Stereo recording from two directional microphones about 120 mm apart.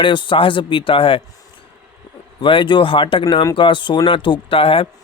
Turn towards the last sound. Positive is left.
turn(degrees=50)  # may be behind; listen again after turning